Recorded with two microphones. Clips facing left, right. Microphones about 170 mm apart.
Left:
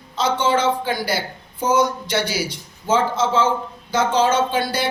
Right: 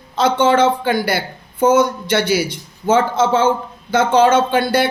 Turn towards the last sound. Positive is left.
turn(degrees=-55)  # may be behind; listen again after turning